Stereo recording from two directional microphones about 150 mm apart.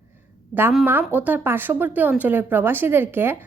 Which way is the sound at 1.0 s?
10° right (ahead or behind).